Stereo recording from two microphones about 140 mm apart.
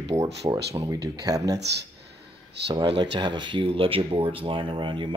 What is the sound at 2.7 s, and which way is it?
Speech, 30° right (ahead or behind).